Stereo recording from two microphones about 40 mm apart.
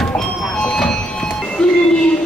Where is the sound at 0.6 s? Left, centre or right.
Centre.